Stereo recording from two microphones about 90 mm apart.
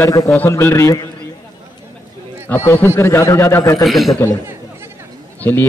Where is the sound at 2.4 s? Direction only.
25° left (ahead or behind).